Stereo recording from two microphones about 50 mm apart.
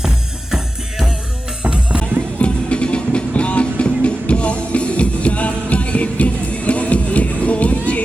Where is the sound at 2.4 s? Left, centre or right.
Left.